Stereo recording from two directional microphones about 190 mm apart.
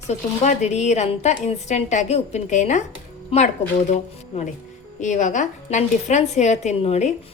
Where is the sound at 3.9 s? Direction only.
40° left (ahead or behind).